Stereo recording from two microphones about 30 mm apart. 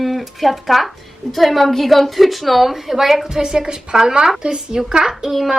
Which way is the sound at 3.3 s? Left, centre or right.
Centre.